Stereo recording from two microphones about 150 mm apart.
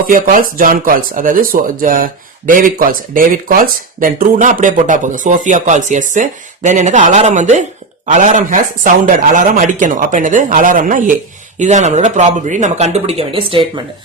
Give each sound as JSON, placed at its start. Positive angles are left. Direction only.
{"t": 0.1, "sound": "speech", "side_deg": -65}
{"t": 11.6, "sound": "speech", "side_deg": -50}